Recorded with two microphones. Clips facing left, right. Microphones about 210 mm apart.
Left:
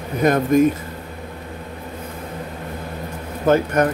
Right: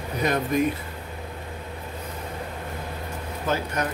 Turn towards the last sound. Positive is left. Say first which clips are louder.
# left 10 dB
turn(degrees=55)  # may be behind; listen again after turning